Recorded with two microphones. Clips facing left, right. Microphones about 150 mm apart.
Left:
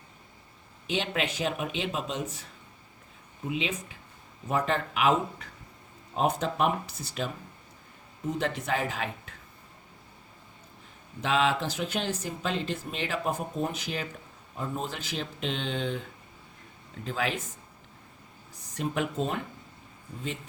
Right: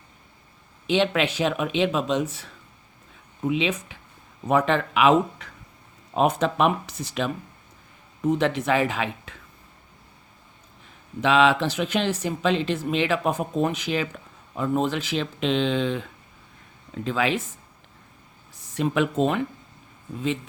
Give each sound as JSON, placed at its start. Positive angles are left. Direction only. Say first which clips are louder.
{"t": 0.9, "sound": "speech", "louder": "right 8 dB", "side_deg": -90}
{"t": 4.4, "sound": "speech", "louder": "right 7 dB", "side_deg": -75}
{"t": 11.2, "sound": "speech", "louder": "right 7 dB", "side_deg": -80}
{"t": 18.7, "sound": "speech", "louder": "right 7 dB", "side_deg": -90}